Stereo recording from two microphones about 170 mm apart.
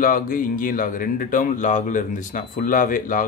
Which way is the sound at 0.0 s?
55° left (ahead or behind).